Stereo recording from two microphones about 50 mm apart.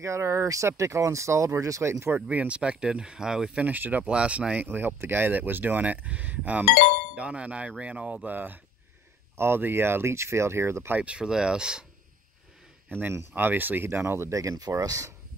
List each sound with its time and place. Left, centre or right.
0.0 s speech: right
2.2 s speech: right
3.6 s speech: right
4.0 s speech: right
4.6 s speech: right
9.4 s speech: right
11.0 s speech: right
12.9 s speech: right
13.8 s speech: right